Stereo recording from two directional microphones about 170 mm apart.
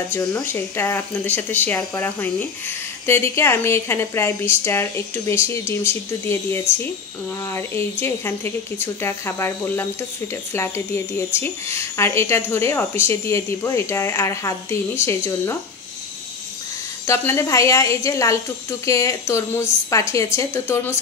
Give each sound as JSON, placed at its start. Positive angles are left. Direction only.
{"t": 0.1, "sound": "speech", "side_deg": 15}
{"t": 11.1, "sound": "speech", "side_deg": 15}
{"t": 17.0, "sound": "speech", "side_deg": 15}